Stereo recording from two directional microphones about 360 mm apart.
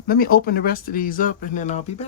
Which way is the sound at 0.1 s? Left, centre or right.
Left.